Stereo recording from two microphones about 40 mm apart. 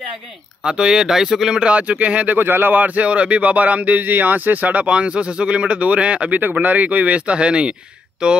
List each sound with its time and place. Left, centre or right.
0.7 s speech: centre
1.6 s speech: right
2.3 s speech: right
6.6 s speech: right